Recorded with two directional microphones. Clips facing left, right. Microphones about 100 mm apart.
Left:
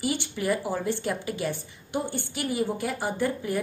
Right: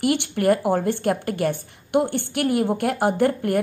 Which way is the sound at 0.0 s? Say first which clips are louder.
Right 8 dB; 60° right (ahead or behind).